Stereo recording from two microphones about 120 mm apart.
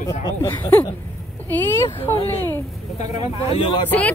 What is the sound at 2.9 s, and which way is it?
Speech, 70° left (ahead or behind).